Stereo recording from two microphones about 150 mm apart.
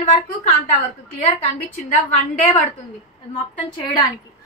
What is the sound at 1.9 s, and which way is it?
Speech, 55° left (ahead or behind).